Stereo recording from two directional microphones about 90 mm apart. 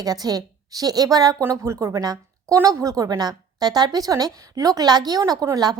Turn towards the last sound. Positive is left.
turn(degrees=-45)  # may be behind; listen again after turning